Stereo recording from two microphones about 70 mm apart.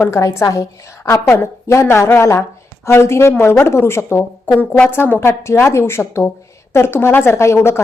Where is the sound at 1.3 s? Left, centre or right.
Left.